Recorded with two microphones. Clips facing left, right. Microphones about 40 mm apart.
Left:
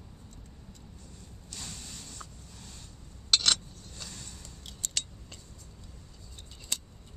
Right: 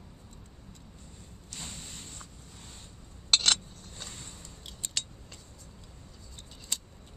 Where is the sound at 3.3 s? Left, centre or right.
Right.